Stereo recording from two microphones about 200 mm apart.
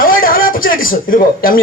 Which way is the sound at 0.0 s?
45° left (ahead or behind).